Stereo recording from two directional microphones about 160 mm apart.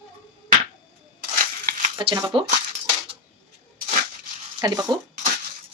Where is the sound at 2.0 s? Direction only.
25° right (ahead or behind).